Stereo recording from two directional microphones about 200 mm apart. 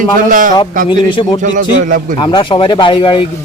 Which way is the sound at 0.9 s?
25° left (ahead or behind).